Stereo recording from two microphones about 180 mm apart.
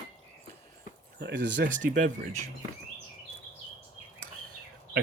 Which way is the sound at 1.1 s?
80° right.